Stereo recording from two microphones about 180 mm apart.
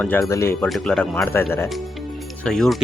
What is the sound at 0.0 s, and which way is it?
Speech, 15° left (ahead or behind).